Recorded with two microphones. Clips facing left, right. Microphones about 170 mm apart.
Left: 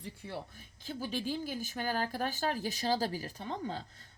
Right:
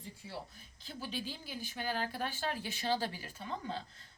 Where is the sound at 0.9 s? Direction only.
45° left (ahead or behind).